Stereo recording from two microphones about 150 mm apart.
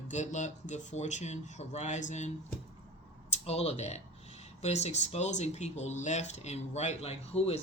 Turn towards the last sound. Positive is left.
turn(degrees=45)  # may be behind; listen again after turning